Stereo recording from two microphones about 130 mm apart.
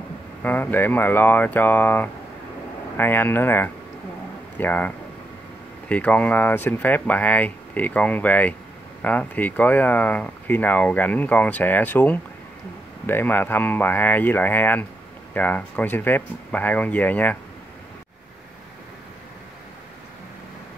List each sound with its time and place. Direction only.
0.4 s speech: 15° left (ahead or behind)